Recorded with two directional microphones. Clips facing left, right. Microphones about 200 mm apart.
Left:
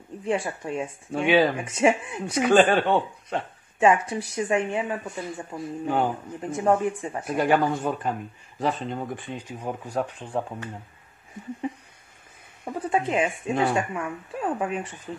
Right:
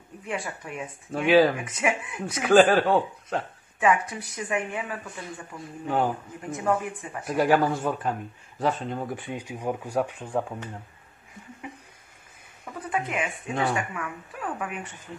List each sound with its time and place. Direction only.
0.2 s speech: 30° left (ahead or behind)
1.1 s a man's voice: centre (ahead or behind)
1.6 s speech: 30° left (ahead or behind)
2.3 s a man's voice: centre (ahead or behind)
3.8 s speech: 25° left (ahead or behind)
5.9 s a man's voice: centre (ahead or behind)
6.5 s speech: 30° left (ahead or behind)
7.2 s a man's voice: centre (ahead or behind)
10.3 s speech: 5° left (ahead or behind)
12.6 s speech: 30° left (ahead or behind)